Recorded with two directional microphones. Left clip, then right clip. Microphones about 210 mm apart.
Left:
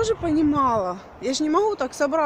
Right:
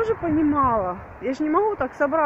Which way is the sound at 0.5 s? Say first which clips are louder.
Right 2 dB; 10° left (ahead or behind).